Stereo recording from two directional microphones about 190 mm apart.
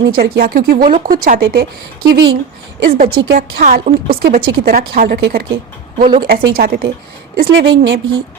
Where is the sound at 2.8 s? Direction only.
55° right (ahead or behind).